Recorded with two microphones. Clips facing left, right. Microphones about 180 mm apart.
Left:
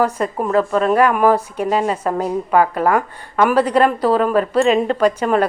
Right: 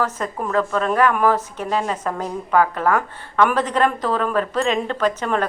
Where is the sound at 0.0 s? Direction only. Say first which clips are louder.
Left 5 dB; 15° left (ahead or behind).